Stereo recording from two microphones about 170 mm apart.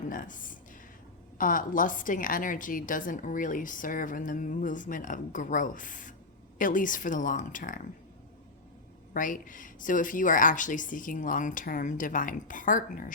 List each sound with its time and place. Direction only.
0.1 s a woman's voice: 50° left (ahead or behind)
9.1 s a woman's voice: 50° left (ahead or behind)